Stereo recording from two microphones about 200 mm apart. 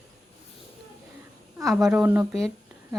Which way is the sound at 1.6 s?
5° right (ahead or behind).